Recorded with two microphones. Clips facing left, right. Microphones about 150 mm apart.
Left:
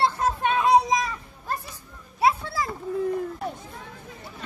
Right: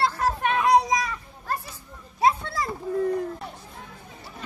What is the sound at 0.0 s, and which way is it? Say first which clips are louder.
Children playing: left 1 dB; 25° left (ahead or behind).